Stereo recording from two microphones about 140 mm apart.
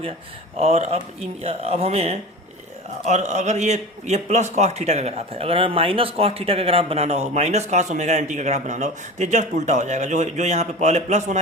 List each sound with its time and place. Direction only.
0.6 s a man's voice: 50° right (ahead or behind)